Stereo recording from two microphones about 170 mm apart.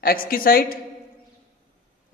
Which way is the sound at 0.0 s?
60° left (ahead or behind).